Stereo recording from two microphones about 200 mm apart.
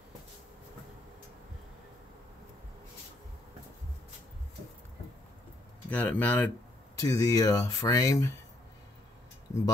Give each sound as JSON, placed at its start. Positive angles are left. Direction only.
{"t": 5.9, "sound": "speech", "side_deg": 10}